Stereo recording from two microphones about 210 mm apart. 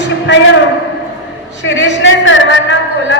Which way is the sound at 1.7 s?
60° left (ahead or behind).